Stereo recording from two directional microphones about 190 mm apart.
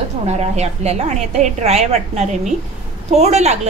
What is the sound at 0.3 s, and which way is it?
A woman's voice, 35° right (ahead or behind).